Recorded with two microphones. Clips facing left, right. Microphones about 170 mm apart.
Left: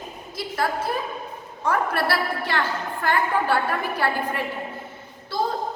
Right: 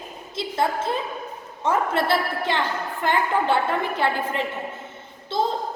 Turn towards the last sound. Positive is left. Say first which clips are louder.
# right 2 dB
turn(degrees=-25)  # may be behind; listen again after turning